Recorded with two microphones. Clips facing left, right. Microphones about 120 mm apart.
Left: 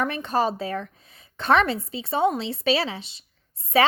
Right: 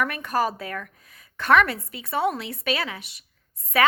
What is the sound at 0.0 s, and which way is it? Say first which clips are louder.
Speech: left 1 dB; 25° left (ahead or behind).